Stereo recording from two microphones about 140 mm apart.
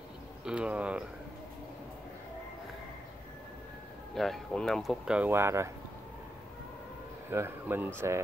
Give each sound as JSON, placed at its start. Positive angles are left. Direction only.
{"t": 0.5, "sound": "speech", "side_deg": -10}
{"t": 4.1, "sound": "speech", "side_deg": 0}
{"t": 7.2, "sound": "speech", "side_deg": -15}